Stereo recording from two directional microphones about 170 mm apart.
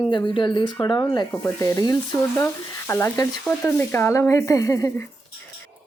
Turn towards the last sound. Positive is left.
turn(degrees=20)  # may be behind; listen again after turning